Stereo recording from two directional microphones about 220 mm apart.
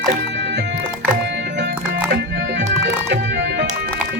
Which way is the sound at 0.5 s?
50° right (ahead or behind).